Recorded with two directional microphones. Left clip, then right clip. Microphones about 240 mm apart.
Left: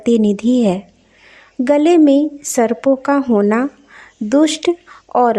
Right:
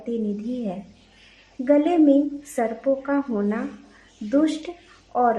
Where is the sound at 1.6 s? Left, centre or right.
Left.